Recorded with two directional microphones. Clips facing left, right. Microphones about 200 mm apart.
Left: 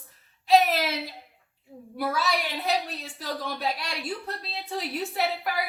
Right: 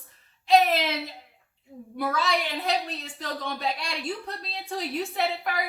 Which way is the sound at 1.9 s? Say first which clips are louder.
Right 1 dB; 5° left (ahead or behind).